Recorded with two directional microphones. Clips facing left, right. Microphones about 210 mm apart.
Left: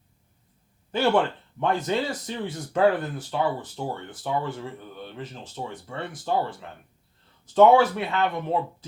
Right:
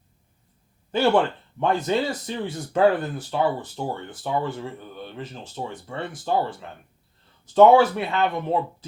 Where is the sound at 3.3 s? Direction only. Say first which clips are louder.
Right 3 dB; 30° right (ahead or behind).